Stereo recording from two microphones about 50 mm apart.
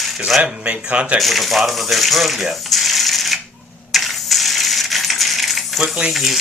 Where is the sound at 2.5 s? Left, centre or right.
Centre.